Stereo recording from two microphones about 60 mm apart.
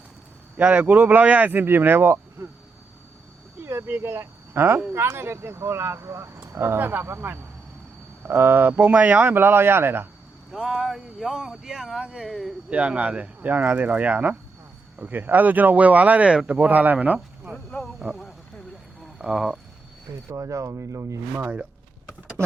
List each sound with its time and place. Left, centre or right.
0.5 s speech: right
3.6 s speech: right
9.2 s speech: right
10.5 s speech: centre
12.7 s speech: right
19.2 s speech: centre
20.3 s speech: right
21.3 s speech: right
22.4 s speech: right